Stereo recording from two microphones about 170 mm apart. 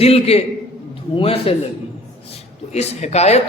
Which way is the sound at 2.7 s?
40° left (ahead or behind).